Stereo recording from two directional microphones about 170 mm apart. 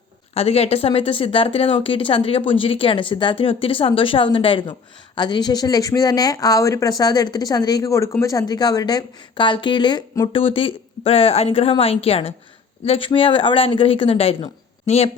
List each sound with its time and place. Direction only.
0.3 s speech: 35° left (ahead or behind)